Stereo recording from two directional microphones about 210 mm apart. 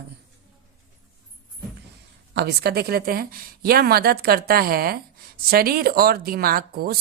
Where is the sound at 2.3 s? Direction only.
50° right (ahead or behind).